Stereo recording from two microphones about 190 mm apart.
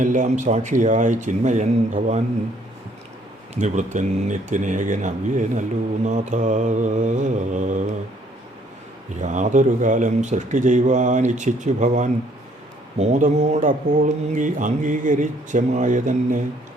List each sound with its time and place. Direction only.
0.0 s speech: 40° right (ahead or behind)
3.5 s speech: 40° right (ahead or behind)
9.2 s speech: 40° right (ahead or behind)